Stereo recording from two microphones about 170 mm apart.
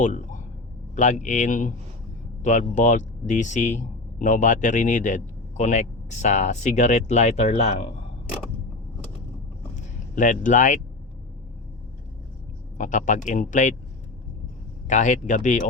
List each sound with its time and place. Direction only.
0.0 s speech: 45° left (ahead or behind)
10.2 s speech: 50° left (ahead or behind)
12.7 s speech: 50° left (ahead or behind)
14.8 s speech: 45° left (ahead or behind)